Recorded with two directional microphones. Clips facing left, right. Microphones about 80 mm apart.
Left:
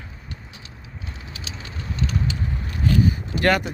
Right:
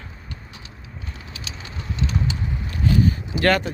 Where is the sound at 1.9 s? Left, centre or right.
Left.